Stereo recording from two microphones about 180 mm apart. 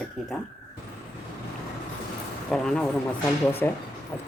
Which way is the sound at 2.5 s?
5° left (ahead or behind).